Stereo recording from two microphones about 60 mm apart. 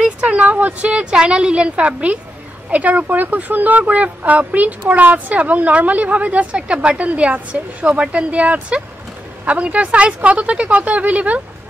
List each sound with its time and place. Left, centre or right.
0.0 s speech: centre